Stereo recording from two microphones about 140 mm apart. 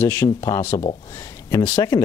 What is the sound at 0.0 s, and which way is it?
Speech, 15° left (ahead or behind).